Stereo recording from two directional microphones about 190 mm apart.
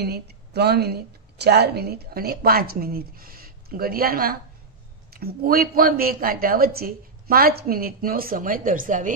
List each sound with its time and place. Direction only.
0.0 s a woman's voice: 55° right (ahead or behind)